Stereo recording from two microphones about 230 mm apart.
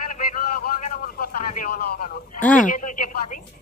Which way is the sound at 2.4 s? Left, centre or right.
Centre.